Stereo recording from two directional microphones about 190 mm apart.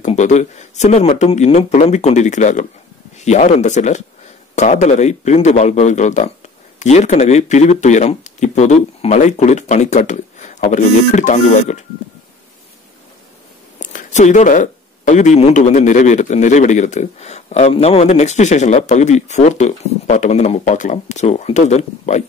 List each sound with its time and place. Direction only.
0.0 s speech: 40° left (ahead or behind)
13.7 s speech: 40° left (ahead or behind)